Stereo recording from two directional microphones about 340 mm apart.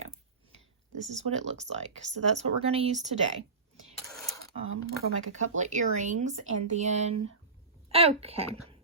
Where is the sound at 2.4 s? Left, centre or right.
Centre.